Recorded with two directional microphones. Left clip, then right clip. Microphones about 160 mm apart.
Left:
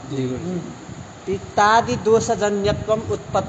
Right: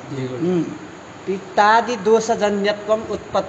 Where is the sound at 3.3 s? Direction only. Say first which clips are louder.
Right 1 dB; 25° left (ahead or behind).